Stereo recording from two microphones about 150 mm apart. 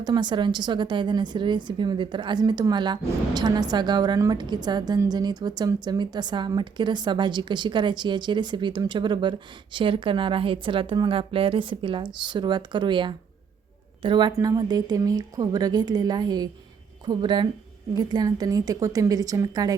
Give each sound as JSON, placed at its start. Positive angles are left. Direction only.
{"t": 0.0, "sound": "a woman's voice", "side_deg": -30}